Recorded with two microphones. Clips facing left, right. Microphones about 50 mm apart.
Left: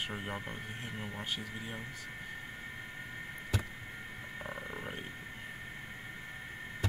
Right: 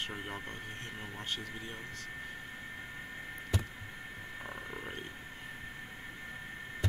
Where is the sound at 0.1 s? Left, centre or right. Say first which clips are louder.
Left 1 dB; centre.